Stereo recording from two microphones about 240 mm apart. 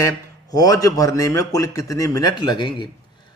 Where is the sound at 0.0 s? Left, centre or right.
Centre.